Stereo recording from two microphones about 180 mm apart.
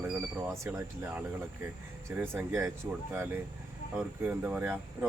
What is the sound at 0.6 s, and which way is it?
Speech, 15° right (ahead or behind).